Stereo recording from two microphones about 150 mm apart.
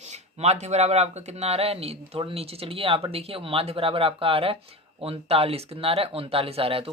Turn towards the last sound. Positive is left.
turn(degrees=-40)  # may be behind; listen again after turning